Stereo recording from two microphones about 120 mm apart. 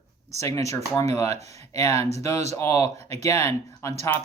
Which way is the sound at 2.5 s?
25° left (ahead or behind).